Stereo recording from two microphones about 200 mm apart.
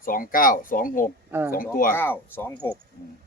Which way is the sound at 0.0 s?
45° left (ahead or behind).